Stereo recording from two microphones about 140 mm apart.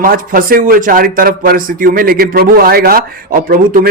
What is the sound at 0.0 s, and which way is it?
Speech, 80° right.